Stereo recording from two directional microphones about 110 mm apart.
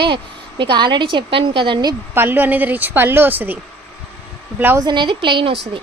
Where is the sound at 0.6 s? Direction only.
45° right (ahead or behind).